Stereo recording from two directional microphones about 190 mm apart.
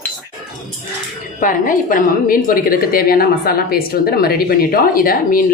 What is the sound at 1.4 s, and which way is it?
A woman's voice, 45° left (ahead or behind).